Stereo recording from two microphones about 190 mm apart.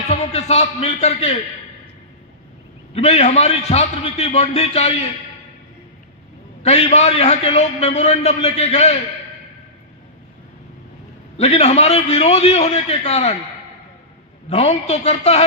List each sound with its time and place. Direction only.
0.1 s a man's voice: 35° left (ahead or behind)
2.9 s a man's voice: 35° left (ahead or behind)
6.6 s a man's voice: 35° left (ahead or behind)
11.3 s a man's voice: 35° left (ahead or behind)
14.5 s a man's voice: 35° left (ahead or behind)